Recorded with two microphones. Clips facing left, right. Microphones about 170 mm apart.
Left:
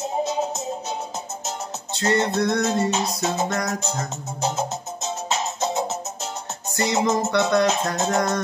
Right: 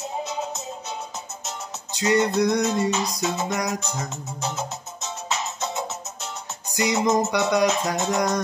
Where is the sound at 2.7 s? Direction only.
30° left (ahead or behind).